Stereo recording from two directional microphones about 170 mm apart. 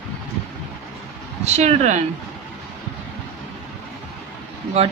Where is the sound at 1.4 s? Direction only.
40° right (ahead or behind).